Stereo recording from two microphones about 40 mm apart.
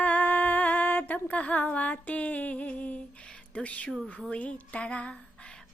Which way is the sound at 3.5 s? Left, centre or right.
Left.